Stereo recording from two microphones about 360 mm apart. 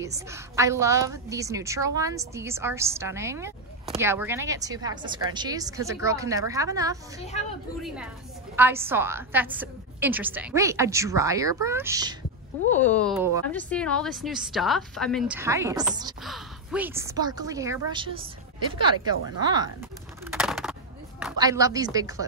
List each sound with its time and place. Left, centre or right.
0.0 s a woman's voice: centre
7.2 s speech: centre
7.8 s a woman's voice: centre
12.7 s a woman's voice: centre
20.2 s a sound: centre
21.2 s a woman's voice: centre